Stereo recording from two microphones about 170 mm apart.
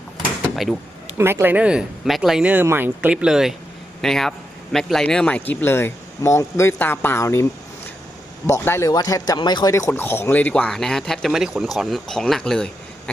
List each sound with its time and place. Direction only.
0.4 s a sound: centre (ahead or behind)
1.2 s speech: 15° right (ahead or behind); by 7.4 s 15° left (ahead or behind)
8.4 s speech: 15° left (ahead or behind)